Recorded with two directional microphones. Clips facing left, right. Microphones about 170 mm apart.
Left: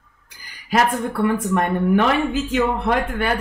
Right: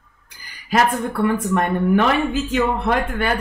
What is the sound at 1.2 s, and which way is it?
Speech, 15° left (ahead or behind).